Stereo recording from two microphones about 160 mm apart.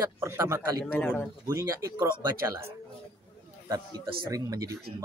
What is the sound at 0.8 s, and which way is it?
Speech, 10° left (ahead or behind).